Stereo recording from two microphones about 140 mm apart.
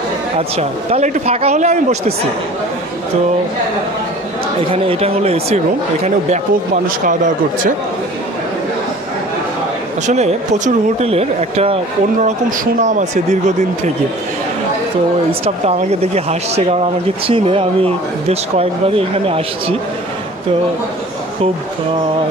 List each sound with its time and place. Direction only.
0.4 s speech: 50° right (ahead or behind)
4.7 s speech: 45° right (ahead or behind)
6.0 s speech: 60° right (ahead or behind)
10.0 s speech: 55° right (ahead or behind)
12.4 s speech: 65° right (ahead or behind)
15.4 s speech: 50° right (ahead or behind)